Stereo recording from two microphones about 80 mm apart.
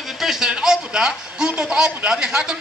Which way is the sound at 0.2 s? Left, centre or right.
Centre.